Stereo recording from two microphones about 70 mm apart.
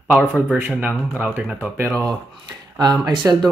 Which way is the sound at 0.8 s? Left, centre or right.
Centre.